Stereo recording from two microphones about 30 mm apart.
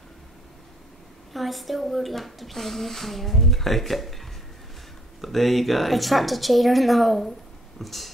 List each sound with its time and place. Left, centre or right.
1.3 s speech: centre